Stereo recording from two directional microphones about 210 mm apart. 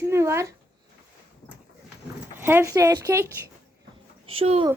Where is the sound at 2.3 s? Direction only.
10° right (ahead or behind).